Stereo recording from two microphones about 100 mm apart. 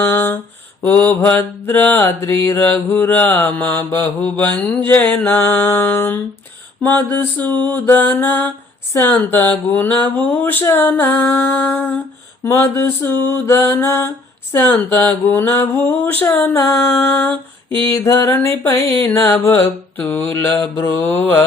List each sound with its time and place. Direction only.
0.0 s mantra: 20° left (ahead or behind)
12.5 s mantra: 25° left (ahead or behind)